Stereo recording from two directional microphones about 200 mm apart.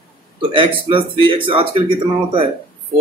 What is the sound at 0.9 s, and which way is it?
Speech, 25° right (ahead or behind).